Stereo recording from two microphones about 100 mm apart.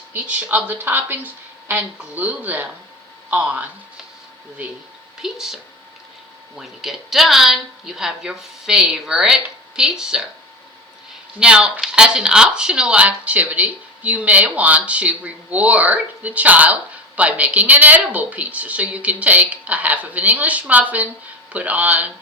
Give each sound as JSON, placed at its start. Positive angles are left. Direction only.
{"t": 0.1, "sound": "speech", "side_deg": -15}
{"t": 5.2, "sound": "a woman's voice", "side_deg": -5}
{"t": 6.6, "sound": "a woman's voice", "side_deg": 0}
{"t": 11.3, "sound": "speech", "side_deg": -10}